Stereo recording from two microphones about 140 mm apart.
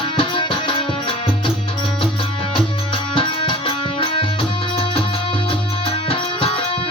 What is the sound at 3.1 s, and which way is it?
Music, 35° left (ahead or behind).